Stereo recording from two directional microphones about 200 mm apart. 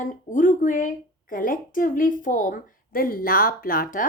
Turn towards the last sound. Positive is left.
turn(degrees=45)  # may be behind; listen again after turning